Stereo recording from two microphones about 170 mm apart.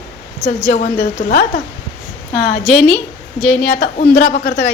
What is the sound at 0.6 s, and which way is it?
Speech, 45° left (ahead or behind).